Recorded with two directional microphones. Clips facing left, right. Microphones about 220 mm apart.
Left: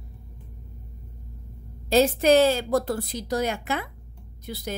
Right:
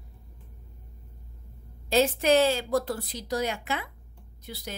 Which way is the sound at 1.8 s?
40° left (ahead or behind).